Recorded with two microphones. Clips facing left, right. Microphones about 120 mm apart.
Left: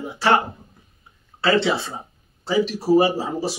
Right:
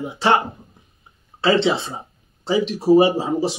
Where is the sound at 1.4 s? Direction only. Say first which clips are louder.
Right 2 dB; 20° right (ahead or behind).